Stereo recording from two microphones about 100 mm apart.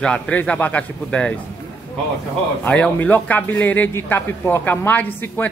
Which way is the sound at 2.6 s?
15° left (ahead or behind).